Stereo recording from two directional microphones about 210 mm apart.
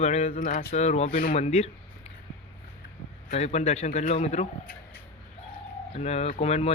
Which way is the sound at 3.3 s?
30° left (ahead or behind).